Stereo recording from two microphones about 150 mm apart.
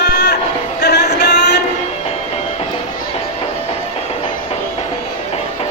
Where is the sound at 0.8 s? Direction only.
90° left.